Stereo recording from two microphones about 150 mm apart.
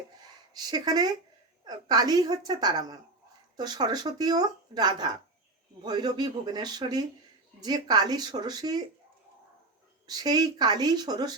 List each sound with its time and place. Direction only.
0.2 s a sound: 25° right (ahead or behind)
1.6 s speech: 30° right (ahead or behind)
10.1 s speech: 25° right (ahead or behind)